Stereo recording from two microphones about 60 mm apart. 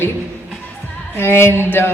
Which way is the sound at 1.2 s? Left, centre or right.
Left.